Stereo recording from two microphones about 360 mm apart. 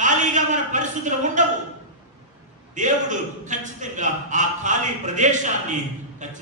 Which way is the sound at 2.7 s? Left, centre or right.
Centre.